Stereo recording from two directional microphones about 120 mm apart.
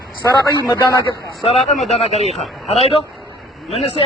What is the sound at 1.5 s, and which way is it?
Speech, 60° left (ahead or behind).